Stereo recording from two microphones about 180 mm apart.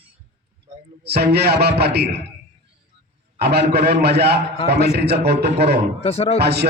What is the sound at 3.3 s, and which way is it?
A man's voice, 65° right (ahead or behind).